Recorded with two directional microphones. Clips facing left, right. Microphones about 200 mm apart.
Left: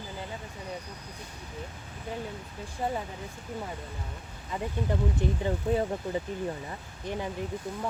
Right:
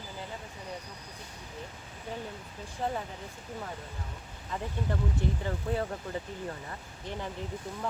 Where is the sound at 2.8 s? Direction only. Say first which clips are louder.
Left 2 dB; 10° left (ahead or behind).